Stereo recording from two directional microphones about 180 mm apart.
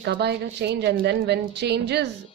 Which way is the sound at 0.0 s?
65° right (ahead or behind).